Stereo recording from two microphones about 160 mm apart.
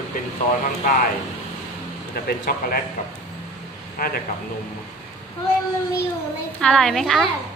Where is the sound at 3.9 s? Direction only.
65° left (ahead or behind).